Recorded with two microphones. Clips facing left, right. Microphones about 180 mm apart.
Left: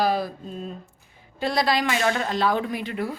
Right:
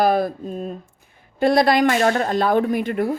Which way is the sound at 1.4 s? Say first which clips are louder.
Right 7 dB; 55° right (ahead or behind).